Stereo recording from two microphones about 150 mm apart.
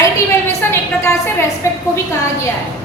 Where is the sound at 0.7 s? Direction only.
15° left (ahead or behind).